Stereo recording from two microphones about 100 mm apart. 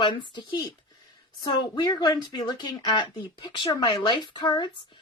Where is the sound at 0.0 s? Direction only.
50° left (ahead or behind).